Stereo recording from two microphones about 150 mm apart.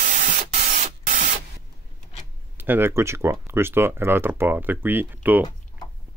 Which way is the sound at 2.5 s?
15° right (ahead or behind).